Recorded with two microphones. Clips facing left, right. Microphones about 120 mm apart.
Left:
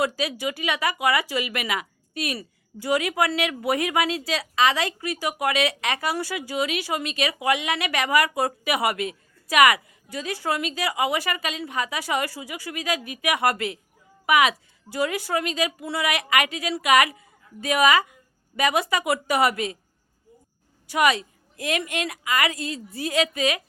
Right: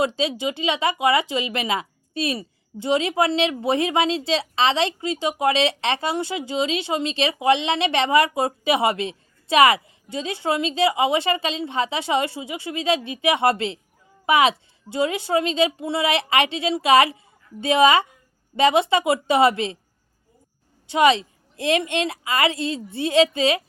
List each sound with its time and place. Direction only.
0.0 s speech: 25° right (ahead or behind)
20.8 s speech: 25° right (ahead or behind)